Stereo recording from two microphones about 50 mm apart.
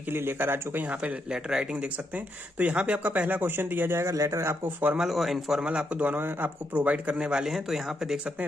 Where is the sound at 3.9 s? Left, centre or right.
Right.